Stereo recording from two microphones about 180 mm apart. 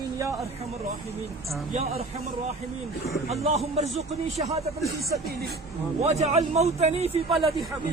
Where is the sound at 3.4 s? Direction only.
40° right (ahead or behind).